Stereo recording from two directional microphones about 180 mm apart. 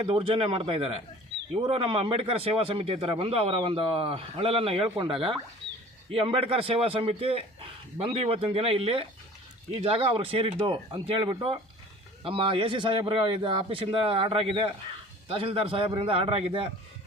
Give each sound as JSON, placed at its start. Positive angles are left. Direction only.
{"t": 0.1, "sound": "a man's voice", "side_deg": -30}